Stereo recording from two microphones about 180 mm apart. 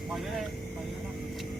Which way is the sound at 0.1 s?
Centre (ahead or behind).